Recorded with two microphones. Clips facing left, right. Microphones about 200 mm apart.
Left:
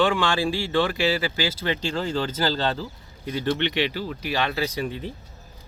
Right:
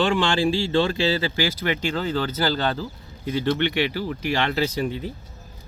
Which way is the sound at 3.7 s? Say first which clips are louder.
Right 2 dB; 10° right (ahead or behind).